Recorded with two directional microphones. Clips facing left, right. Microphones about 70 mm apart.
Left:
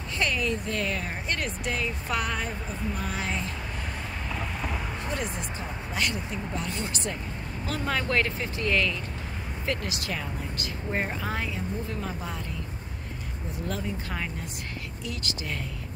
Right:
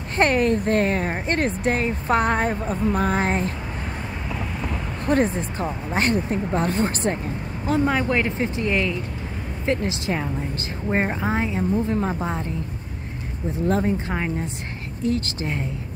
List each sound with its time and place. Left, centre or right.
0.1 s speech: right
4.3 s vehicle: centre
5.0 s speech: right
7.6 s a woman's voice: right
13.5 s a woman's voice: right